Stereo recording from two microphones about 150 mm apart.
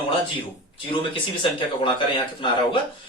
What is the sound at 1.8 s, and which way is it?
A man's voice, 35° left (ahead or behind).